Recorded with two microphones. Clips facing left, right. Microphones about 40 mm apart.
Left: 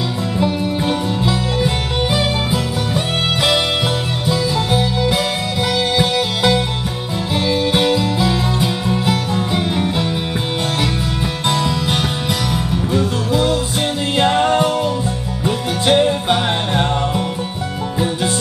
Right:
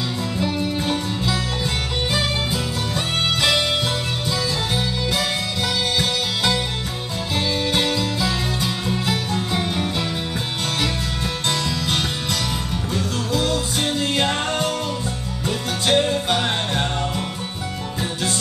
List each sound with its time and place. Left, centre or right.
0.4 s music: centre
4.3 s music: centre
11.4 s music: centre